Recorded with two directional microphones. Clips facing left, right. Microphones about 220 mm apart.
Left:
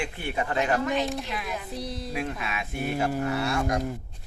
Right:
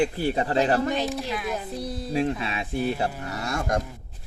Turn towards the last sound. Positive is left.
turn(degrees=-45)  # may be behind; listen again after turning